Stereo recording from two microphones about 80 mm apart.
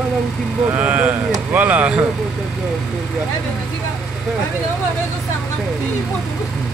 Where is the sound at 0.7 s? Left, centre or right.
Centre.